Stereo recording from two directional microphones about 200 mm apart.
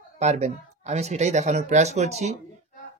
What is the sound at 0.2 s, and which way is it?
A man's voice, 35° right (ahead or behind).